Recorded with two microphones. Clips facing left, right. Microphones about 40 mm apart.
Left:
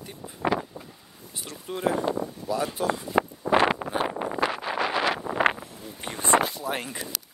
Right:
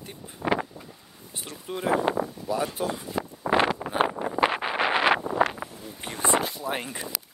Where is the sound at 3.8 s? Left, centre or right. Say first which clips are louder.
Left 1 dB; left.